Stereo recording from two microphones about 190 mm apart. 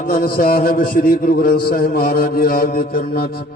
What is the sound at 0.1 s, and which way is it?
A man's voice, 50° left (ahead or behind).